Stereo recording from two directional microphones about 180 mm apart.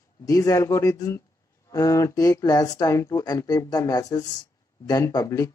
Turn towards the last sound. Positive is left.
turn(degrees=20)  # may be behind; listen again after turning